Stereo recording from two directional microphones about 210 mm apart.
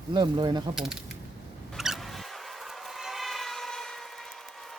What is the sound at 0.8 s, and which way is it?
Speech, 5° right (ahead or behind).